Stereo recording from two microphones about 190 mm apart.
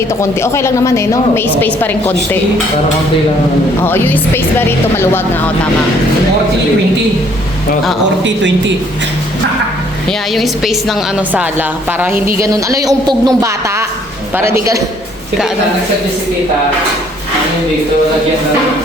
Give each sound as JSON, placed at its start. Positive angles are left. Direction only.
{"t": 0.2, "sound": "a woman's voice", "side_deg": 15}
{"t": 3.8, "sound": "a woman's voice", "side_deg": 10}
{"t": 8.2, "sound": "speech", "side_deg": -70}
{"t": 10.1, "sound": "a woman's voice", "side_deg": 0}